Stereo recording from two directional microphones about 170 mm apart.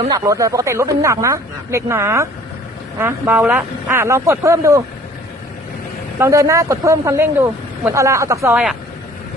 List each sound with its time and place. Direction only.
0.1 s speech: 20° right (ahead or behind)
6.1 s speech: 15° right (ahead or behind)